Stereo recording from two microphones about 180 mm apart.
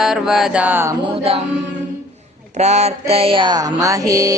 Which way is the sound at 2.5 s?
40° right (ahead or behind).